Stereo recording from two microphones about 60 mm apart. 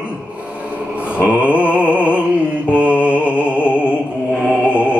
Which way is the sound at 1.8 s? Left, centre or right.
Left.